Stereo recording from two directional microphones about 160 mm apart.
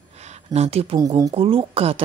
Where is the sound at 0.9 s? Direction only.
25° right (ahead or behind).